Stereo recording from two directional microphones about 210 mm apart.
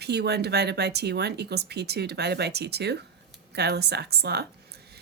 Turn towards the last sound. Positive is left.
turn(degrees=-50)  # may be behind; listen again after turning